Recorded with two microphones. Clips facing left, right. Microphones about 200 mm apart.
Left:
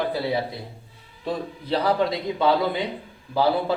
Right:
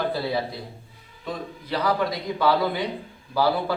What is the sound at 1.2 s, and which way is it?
A man's voice, 30° left (ahead or behind).